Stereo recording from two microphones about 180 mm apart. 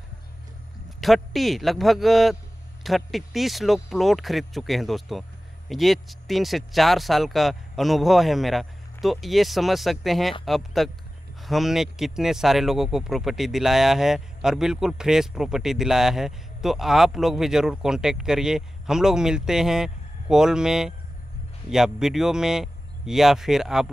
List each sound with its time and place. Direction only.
0.8 s speech: centre (ahead or behind)